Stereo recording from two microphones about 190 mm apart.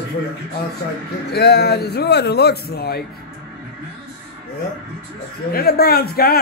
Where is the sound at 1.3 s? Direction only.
60° left (ahead or behind).